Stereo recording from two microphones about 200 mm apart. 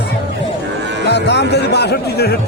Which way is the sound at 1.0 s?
60° left (ahead or behind).